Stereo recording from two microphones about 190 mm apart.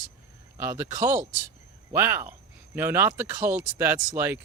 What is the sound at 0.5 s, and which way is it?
Speech, 15° right (ahead or behind).